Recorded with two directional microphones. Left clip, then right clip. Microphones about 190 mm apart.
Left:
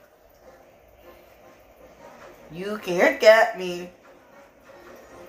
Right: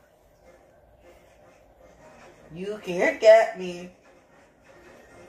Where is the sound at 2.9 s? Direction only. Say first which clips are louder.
Left 1 dB; 55° left (ahead or behind).